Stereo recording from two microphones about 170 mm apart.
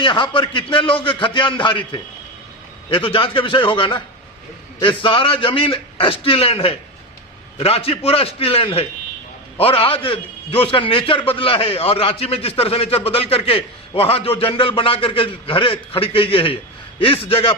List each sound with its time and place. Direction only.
0.0 s a man's voice: 30° left (ahead or behind)